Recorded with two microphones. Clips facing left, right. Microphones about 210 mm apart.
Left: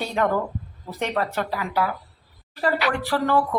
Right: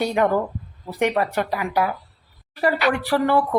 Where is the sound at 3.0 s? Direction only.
10° right (ahead or behind).